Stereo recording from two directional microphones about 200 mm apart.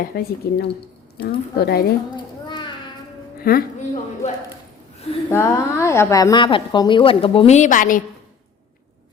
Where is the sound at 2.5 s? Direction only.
25° left (ahead or behind).